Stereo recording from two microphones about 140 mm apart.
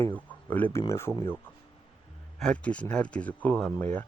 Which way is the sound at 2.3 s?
5° left (ahead or behind).